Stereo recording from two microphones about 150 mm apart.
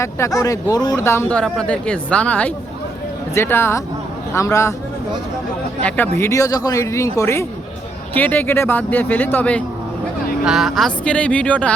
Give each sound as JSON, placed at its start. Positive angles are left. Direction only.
{"t": 0.0, "sound": "speech", "side_deg": 20}
{"t": 1.0, "sound": "speech", "side_deg": 15}
{"t": 6.1, "sound": "speech", "side_deg": 20}
{"t": 10.4, "sound": "speech", "side_deg": 0}